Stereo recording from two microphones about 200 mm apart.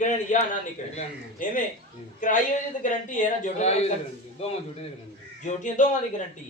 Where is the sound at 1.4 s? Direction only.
45° left (ahead or behind).